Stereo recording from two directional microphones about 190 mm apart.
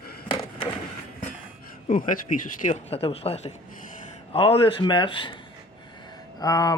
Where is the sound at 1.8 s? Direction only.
45° left (ahead or behind); by 5.3 s 25° left (ahead or behind).